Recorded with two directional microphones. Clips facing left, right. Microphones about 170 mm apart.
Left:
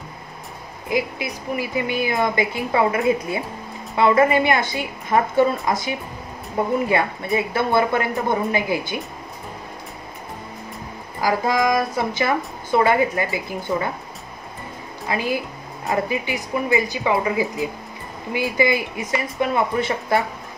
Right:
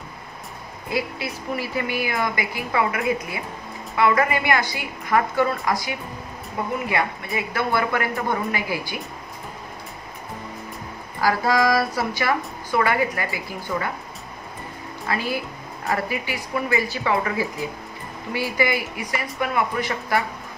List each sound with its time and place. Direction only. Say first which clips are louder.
0.8 s a woman's voice: left 3 dB; 15° left (ahead or behind)
11.1 s a woman's voice: even; 15° left (ahead or behind)
15.0 s a woman's voice: left 3 dB; 15° left (ahead or behind)